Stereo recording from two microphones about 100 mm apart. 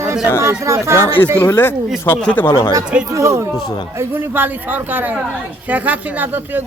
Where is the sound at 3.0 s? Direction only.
30° right (ahead or behind).